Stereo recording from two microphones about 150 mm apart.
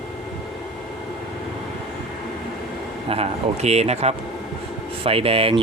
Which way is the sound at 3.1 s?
45° right (ahead or behind).